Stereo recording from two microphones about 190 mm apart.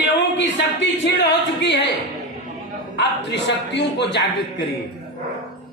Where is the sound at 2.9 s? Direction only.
65° left (ahead or behind).